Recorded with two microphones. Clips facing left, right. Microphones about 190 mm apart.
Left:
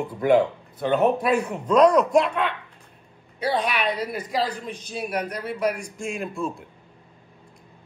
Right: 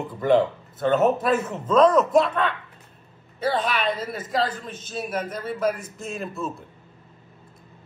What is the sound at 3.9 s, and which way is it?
Speech, centre (ahead or behind).